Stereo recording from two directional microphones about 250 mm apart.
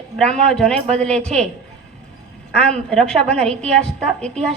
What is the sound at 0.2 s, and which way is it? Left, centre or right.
A woman's voice, centre.